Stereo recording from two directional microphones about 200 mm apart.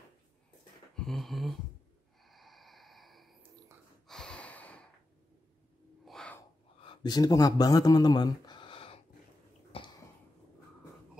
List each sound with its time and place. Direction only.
0.9 s a sound: centre (ahead or behind)
2.2 s snort: centre (ahead or behind)
6.0 s crow: 5° left (ahead or behind)
6.8 s speech: 25° left (ahead or behind)
9.7 s cough: 30° left (ahead or behind)